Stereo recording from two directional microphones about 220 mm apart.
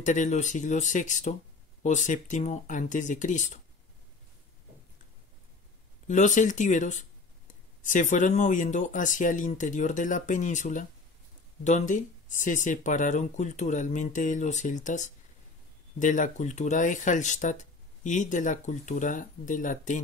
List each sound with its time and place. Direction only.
0.0 s speech: 35° left (ahead or behind)
6.0 s speech: 35° left (ahead or behind)